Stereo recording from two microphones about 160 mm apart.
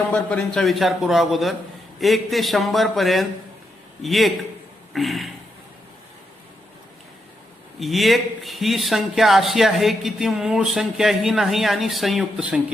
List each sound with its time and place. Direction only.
0.1 s a man's voice: 10° left (ahead or behind)
7.8 s a man's voice: centre (ahead or behind)